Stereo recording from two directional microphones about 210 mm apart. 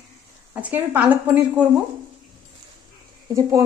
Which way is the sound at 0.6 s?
5° right (ahead or behind).